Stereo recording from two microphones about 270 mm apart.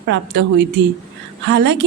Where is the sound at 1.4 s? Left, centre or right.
Right.